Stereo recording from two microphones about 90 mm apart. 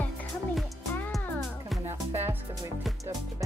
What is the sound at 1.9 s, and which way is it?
Music, 25° right (ahead or behind).